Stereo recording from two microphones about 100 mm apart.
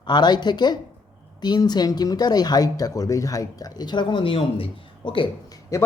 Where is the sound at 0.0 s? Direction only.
45° left (ahead or behind).